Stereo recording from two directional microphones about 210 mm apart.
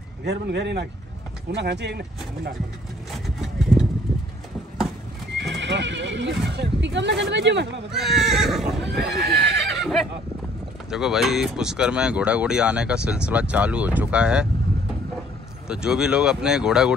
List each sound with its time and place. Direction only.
0.2 s speech: 55° right (ahead or behind)
3.3 s a sound: centre (ahead or behind)
5.5 s speech: 55° right (ahead or behind)
7.9 s speech: centre (ahead or behind)
8.9 s speech: 50° right (ahead or behind)
9.7 s neigh: centre (ahead or behind)
10.9 s speech: centre (ahead or behind)
15.7 s speech: 5° right (ahead or behind)